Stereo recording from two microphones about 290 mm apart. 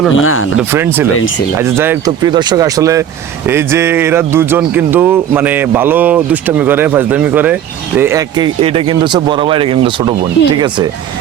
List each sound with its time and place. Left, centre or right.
0.2 s speech: left
0.7 s speech: centre